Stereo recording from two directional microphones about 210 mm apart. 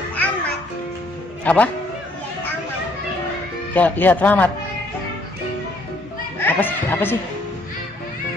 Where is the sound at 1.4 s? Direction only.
5° left (ahead or behind).